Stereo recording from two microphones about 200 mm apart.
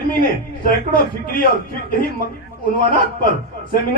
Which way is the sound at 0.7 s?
50° left (ahead or behind).